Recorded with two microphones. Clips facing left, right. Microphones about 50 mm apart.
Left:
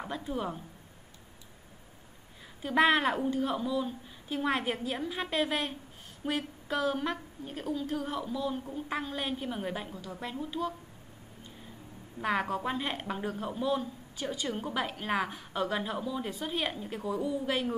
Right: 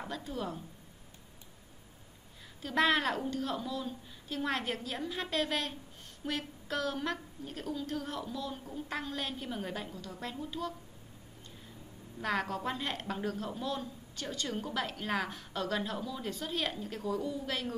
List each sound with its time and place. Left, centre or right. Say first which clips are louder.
0.0 s a woman's voice: left 4 dB; centre
2.6 s a woman's voice: left 4 dB; centre
12.2 s a woman's voice: left 3 dB; centre